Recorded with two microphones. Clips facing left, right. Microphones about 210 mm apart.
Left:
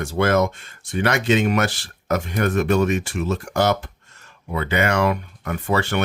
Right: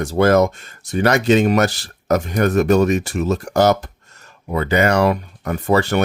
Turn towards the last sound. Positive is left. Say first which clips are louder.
# right 5 dB
turn(degrees=-40)  # may be behind; listen again after turning